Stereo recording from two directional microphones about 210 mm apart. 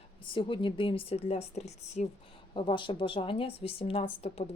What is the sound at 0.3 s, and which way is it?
A woman's voice, 25° left (ahead or behind).